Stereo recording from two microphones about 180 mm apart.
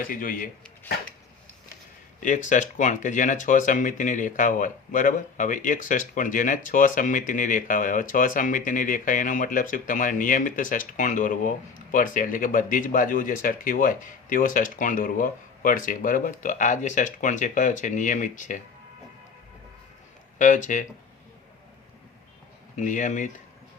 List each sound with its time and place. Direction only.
0.0 s speech: 50° left (ahead or behind)
2.2 s speech: 45° left (ahead or behind)
20.4 s speech: 45° left (ahead or behind)
22.7 s speech: 45° left (ahead or behind)